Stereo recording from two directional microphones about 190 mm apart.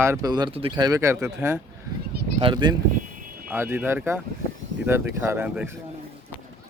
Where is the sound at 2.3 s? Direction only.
25° right (ahead or behind).